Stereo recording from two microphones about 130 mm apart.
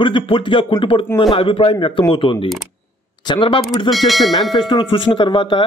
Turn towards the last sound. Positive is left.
turn(degrees=35)  # may be behind; listen again after turning